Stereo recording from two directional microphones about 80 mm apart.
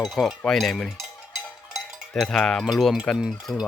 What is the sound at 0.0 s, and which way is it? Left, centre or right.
Cutlery, centre.